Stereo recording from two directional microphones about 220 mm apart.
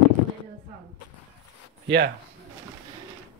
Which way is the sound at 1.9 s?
50° right (ahead or behind).